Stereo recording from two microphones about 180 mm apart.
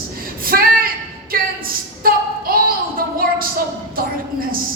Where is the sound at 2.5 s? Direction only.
55° right (ahead or behind).